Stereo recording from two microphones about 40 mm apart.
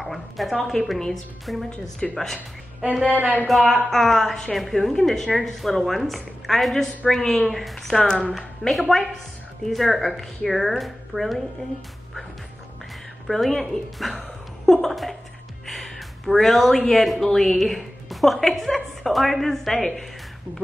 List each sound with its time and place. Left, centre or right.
0.0 s a woman's voice: centre
3.1 s speech: right
3.4 s a woman's voice: centre
7.1 s speech: centre
7.4 s a woman's voice: centre
8.0 s speech: centre
8.4 s a woman's voice: centre
13.3 s a woman's voice: centre